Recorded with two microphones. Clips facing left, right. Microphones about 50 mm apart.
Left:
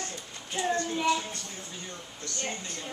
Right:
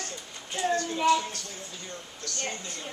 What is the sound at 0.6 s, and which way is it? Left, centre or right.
Speech, left.